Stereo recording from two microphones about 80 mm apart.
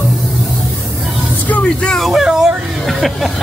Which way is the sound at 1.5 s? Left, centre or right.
Centre.